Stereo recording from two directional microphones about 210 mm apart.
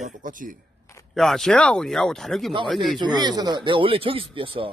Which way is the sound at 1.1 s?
Centre (ahead or behind).